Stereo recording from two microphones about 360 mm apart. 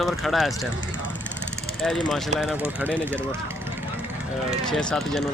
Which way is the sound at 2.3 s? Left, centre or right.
Centre.